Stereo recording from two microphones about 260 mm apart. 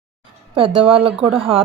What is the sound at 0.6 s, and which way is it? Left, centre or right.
Speech, right.